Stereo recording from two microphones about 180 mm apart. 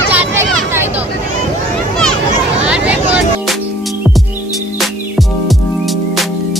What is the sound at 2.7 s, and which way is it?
Music, 5° right (ahead or behind).